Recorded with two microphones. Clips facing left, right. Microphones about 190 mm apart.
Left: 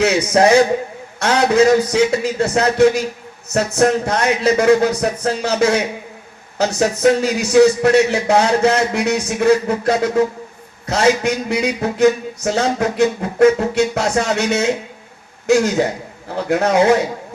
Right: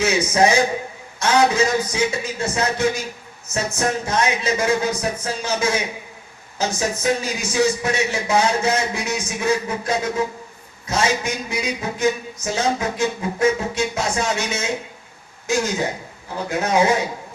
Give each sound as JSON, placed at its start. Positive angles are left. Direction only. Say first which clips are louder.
{"t": 0.0, "sound": "a man's voice", "louder": "left 4 dB", "side_deg": 65}